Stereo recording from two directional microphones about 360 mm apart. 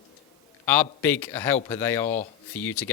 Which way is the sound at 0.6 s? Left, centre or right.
Centre.